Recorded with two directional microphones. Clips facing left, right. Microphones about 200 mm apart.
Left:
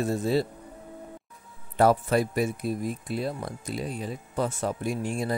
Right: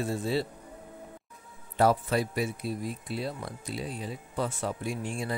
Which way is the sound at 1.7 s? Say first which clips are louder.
Left 3 dB; 50° left (ahead or behind).